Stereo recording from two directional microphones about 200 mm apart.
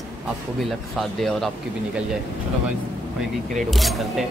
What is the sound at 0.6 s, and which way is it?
Speech, centre (ahead or behind).